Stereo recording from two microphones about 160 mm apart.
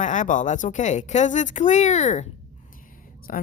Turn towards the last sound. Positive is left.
turn(degrees=55)  # may be behind; listen again after turning